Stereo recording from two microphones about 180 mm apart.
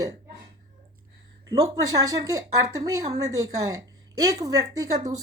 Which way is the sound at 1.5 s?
20° right (ahead or behind).